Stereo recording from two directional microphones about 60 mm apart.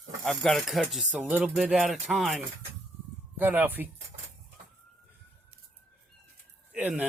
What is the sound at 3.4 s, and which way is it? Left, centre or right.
Speech, right.